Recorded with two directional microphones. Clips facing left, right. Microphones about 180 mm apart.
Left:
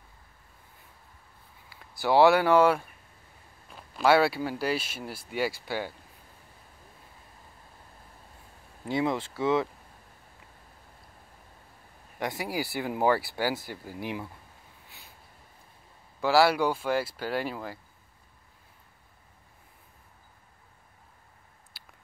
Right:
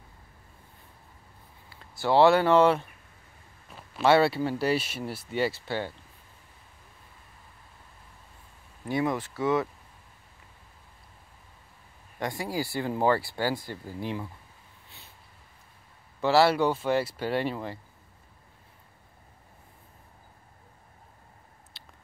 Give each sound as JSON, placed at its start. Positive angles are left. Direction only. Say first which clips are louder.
{"t": 1.7, "sound": "speech", "louder": "even", "side_deg": 10}
{"t": 8.8, "sound": "speech", "louder": "even", "side_deg": 20}
{"t": 9.3, "sound": "speech", "louder": "left 1 dB", "side_deg": 10}
{"t": 12.2, "sound": "speech", "louder": "right 1 dB", "side_deg": 15}
{"t": 16.2, "sound": "speech", "louder": "right 1 dB", "side_deg": 5}